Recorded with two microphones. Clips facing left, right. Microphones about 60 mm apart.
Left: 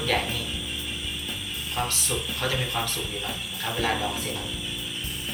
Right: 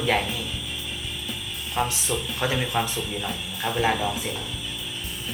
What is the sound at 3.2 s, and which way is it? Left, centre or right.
Speech, centre.